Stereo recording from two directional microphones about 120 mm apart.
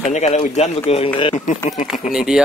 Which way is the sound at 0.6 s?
55° left (ahead or behind).